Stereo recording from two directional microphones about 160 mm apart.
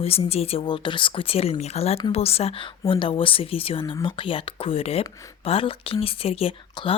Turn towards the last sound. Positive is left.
turn(degrees=35)  # may be behind; listen again after turning